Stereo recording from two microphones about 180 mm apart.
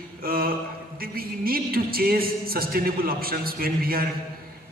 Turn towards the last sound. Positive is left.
turn(degrees=-55)  # may be behind; listen again after turning